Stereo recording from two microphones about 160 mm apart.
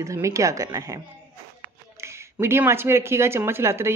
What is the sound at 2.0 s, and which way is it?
Speech, 15° right (ahead or behind).